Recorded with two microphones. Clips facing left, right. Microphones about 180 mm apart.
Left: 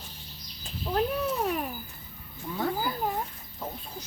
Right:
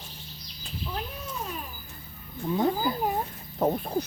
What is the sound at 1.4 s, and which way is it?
Babbling, 65° left (ahead or behind).